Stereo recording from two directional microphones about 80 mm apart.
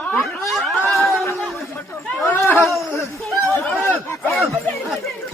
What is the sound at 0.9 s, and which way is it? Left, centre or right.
Chatter, centre.